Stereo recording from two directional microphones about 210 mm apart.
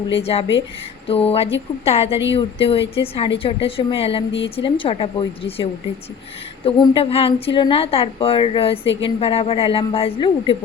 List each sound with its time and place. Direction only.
0.1 s a woman's voice: 30° left (ahead or behind)
6.7 s a woman's voice: 25° left (ahead or behind)